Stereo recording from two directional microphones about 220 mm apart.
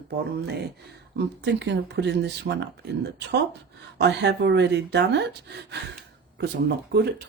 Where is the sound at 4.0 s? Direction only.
50° right (ahead or behind).